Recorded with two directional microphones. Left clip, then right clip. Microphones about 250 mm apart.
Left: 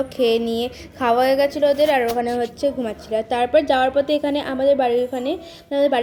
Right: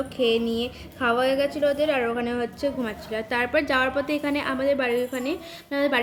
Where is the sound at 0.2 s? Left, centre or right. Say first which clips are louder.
Left 4 dB; centre.